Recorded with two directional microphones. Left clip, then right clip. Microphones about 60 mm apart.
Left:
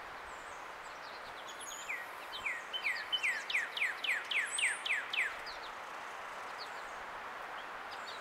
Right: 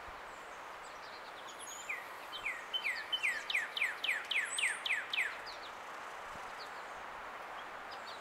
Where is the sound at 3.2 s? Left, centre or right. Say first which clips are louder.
Right 1 dB; right.